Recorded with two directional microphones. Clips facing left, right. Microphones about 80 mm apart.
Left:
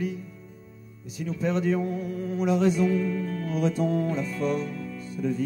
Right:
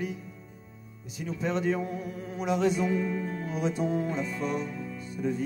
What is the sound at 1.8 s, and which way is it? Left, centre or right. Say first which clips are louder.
Mantra: left 5 dB; right.